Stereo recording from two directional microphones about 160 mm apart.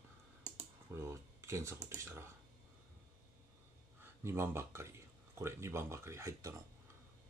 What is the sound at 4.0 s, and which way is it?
Speech, 15° right (ahead or behind).